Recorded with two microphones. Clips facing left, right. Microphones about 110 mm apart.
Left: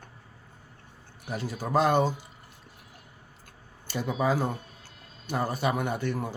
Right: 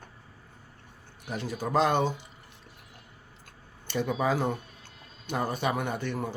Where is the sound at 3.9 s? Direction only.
10° left (ahead or behind).